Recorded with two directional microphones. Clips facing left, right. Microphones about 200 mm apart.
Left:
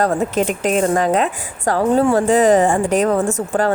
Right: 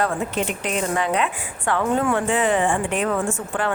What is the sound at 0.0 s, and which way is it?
A woman's voice, 40° left (ahead or behind).